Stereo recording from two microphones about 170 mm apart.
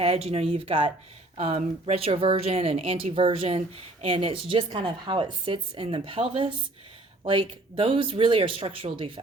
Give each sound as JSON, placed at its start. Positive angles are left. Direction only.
{"t": 0.0, "sound": "a woman's voice", "side_deg": -35}